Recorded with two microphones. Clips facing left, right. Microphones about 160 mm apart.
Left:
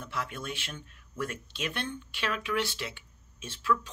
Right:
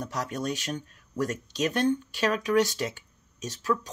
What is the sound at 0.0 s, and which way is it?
Speech, 40° right (ahead or behind).